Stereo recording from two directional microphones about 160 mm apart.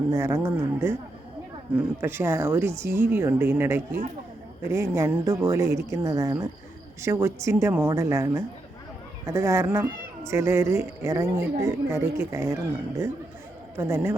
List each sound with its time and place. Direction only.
0.1 s speech: 15° right (ahead or behind)
2.0 s speech: 15° right (ahead or behind)
13.7 s speech: 15° right (ahead or behind)